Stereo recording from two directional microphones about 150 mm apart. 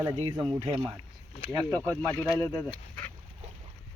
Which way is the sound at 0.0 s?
30° right (ahead or behind).